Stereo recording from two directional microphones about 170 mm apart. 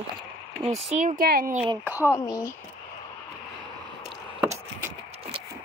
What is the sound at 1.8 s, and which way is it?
Speech, 10° right (ahead or behind).